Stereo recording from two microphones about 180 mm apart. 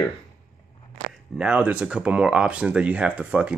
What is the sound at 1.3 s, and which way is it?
Speech, 5° right (ahead or behind).